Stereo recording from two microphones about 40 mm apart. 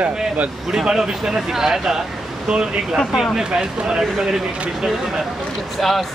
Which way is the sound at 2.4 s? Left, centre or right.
Right.